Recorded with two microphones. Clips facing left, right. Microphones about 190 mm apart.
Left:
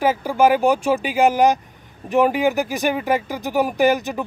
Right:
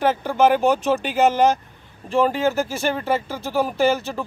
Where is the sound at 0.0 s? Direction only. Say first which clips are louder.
Left 1 dB; 10° left (ahead or behind).